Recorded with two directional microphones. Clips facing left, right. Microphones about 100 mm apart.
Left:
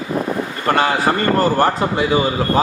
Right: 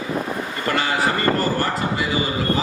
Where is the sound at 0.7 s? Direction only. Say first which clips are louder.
Left 7 dB; 45° left (ahead or behind).